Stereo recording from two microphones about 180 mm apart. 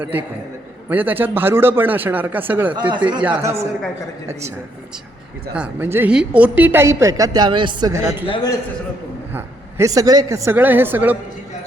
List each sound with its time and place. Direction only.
0.0 s a woman's voice: 10° right (ahead or behind)
5.5 s a woman's voice: 10° right (ahead or behind)
8.3 s a man's voice: 20° left (ahead or behind)
9.3 s speech: 15° right (ahead or behind)